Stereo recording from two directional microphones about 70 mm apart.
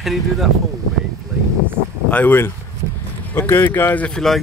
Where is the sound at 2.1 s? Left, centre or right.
Left.